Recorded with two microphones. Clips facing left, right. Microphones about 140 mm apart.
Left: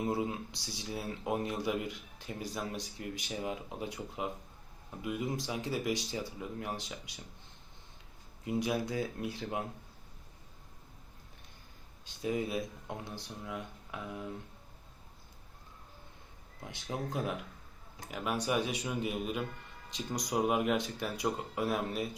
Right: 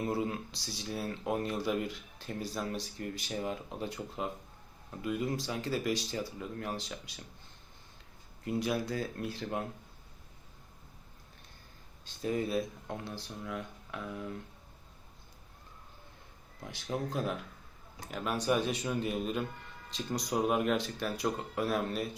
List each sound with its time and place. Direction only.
0.1 s speech: 20° left (ahead or behind)
8.4 s speech: 20° left (ahead or behind)
12.0 s speech: 10° left (ahead or behind)
16.7 s speech: 20° left (ahead or behind)